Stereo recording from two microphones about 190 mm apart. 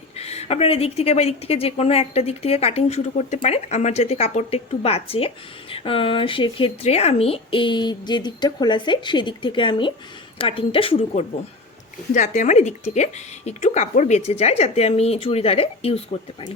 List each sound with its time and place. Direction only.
0.2 s speech: 35° left (ahead or behind)
12.1 s speech: 40° left (ahead or behind)